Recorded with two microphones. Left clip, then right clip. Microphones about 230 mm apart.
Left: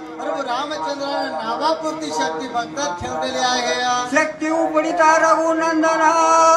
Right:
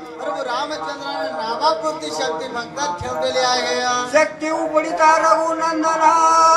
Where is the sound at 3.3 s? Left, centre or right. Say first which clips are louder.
Even; right.